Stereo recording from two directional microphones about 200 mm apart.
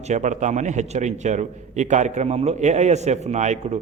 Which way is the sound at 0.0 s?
35° right (ahead or behind).